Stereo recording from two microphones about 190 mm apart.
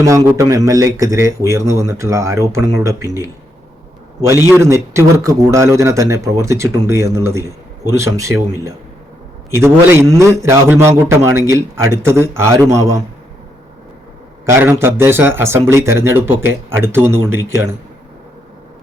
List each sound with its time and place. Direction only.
0.0 s a man's voice: 15° right (ahead or behind)
4.3 s a man's voice: 10° right (ahead or behind)
9.6 s a man's voice: 15° right (ahead or behind)
14.4 s a man's voice: 15° right (ahead or behind)